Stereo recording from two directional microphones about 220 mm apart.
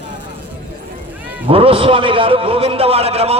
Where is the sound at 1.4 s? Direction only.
25° right (ahead or behind).